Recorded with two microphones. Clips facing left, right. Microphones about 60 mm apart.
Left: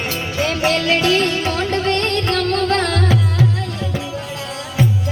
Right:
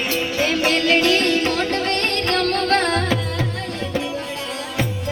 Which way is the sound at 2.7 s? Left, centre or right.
Right.